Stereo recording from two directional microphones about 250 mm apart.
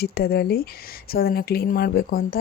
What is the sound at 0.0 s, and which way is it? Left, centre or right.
Speech, left.